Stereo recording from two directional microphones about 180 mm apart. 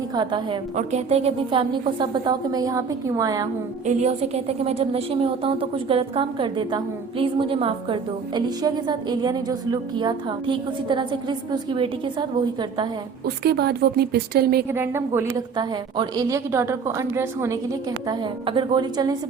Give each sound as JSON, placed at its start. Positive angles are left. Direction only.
{"t": 0.1, "sound": "a woman's voice", "side_deg": -25}
{"t": 0.8, "sound": "a woman's voice", "side_deg": -40}
{"t": 3.8, "sound": "a woman's voice", "side_deg": -35}
{"t": 13.2, "sound": "a woman's voice", "side_deg": -60}
{"t": 14.7, "sound": "a woman's voice", "side_deg": -15}